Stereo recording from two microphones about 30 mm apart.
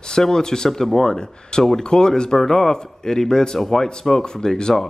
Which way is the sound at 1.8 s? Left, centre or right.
Left.